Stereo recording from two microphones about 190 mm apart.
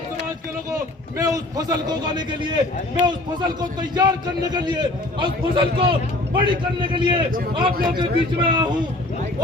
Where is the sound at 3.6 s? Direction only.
20° right (ahead or behind).